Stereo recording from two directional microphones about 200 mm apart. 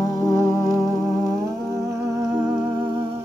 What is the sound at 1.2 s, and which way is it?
Music, 15° right (ahead or behind).